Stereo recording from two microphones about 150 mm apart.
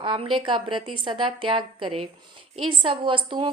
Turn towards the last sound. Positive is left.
turn(degrees=-35)  # may be behind; listen again after turning